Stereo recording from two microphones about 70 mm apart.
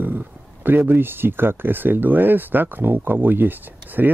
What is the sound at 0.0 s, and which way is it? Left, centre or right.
Speech, right.